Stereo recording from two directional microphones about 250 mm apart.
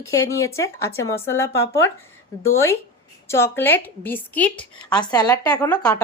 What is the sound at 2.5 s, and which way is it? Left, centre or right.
A woman's voice, centre.